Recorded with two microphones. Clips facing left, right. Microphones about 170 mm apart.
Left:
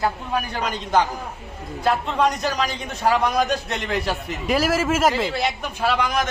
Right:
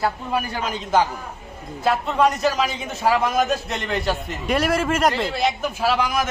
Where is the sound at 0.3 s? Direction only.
5° right (ahead or behind).